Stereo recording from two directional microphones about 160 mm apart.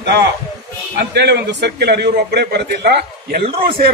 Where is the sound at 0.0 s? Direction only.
90° right.